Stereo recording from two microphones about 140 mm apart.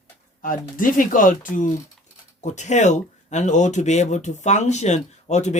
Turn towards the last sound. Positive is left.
turn(degrees=55)  # may be behind; listen again after turning